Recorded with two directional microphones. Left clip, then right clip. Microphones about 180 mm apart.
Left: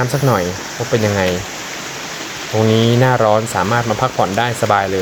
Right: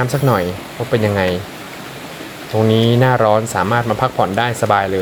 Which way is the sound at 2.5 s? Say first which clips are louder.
Even; centre (ahead or behind).